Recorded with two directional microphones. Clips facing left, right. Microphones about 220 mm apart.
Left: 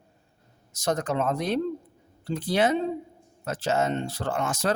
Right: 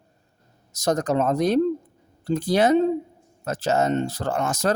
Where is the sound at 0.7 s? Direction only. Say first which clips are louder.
Right 5 dB; 40° right (ahead or behind).